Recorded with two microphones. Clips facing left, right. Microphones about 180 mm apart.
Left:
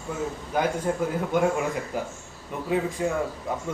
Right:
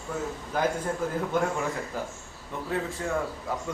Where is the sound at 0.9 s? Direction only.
10° left (ahead or behind).